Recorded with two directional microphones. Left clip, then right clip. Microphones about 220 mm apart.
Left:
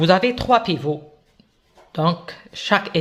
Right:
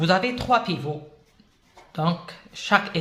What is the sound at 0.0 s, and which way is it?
Speech, 35° left (ahead or behind).